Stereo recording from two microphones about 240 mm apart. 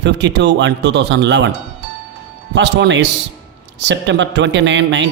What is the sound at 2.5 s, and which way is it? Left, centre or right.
A man's voice, right.